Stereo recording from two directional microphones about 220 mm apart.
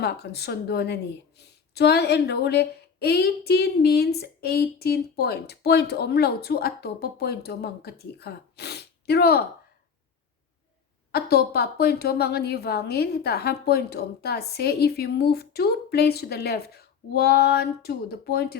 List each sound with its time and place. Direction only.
0.0 s speech: 50° left (ahead or behind)
11.1 s speech: 45° left (ahead or behind)